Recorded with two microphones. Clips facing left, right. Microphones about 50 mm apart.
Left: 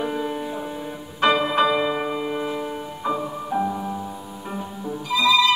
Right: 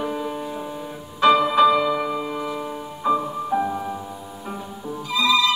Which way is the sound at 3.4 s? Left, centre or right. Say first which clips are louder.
Even; centre.